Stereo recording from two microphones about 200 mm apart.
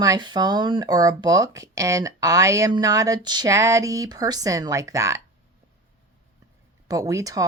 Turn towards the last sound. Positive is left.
turn(degrees=-15)  # may be behind; listen again after turning